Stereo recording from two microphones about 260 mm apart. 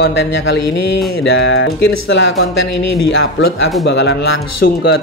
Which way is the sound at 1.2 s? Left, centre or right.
Left.